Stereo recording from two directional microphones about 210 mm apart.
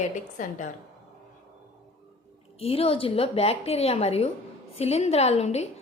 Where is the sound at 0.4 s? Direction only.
40° left (ahead or behind).